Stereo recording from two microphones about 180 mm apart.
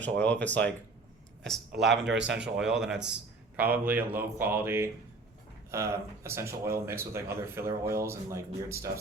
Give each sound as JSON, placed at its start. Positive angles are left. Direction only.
{"t": 0.0, "sound": "speech", "side_deg": 10}
{"t": 1.9, "sound": "a man's voice", "side_deg": -75}
{"t": 2.4, "sound": "speech", "side_deg": -5}